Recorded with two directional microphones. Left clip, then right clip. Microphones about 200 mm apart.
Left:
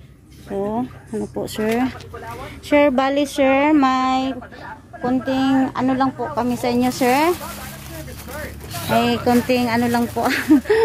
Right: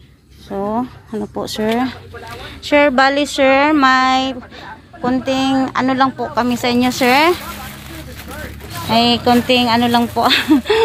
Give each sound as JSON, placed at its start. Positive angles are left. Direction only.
{"t": 0.5, "sound": "speech", "side_deg": 0}
{"t": 1.5, "sound": "speech", "side_deg": 15}
{"t": 8.8, "sound": "speech", "side_deg": 5}